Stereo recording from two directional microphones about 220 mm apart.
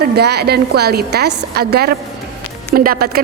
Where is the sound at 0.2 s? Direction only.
45° right (ahead or behind).